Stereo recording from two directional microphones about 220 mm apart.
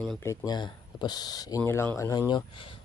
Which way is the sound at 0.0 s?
5° left (ahead or behind).